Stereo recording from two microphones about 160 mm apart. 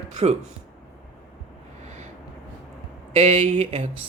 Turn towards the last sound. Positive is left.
turn(degrees=-45)  # may be behind; listen again after turning